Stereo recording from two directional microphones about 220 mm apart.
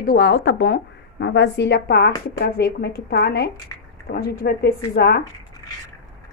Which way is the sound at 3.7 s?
15° left (ahead or behind).